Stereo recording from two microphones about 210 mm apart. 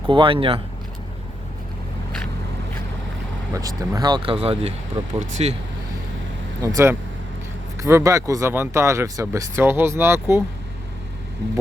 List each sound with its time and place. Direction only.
0.0 s speech: 25° right (ahead or behind)
3.5 s speech: 15° right (ahead or behind); by 5.5 s 30° right (ahead or behind)
6.6 s speech: 15° right (ahead or behind)